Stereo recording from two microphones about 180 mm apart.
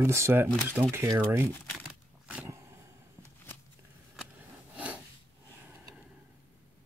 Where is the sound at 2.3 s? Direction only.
10° right (ahead or behind).